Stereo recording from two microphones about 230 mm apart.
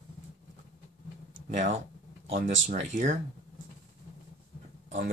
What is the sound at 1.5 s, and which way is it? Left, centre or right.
Speech, right.